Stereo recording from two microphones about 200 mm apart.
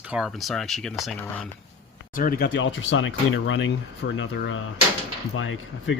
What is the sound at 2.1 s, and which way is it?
Speech, 45° left (ahead or behind).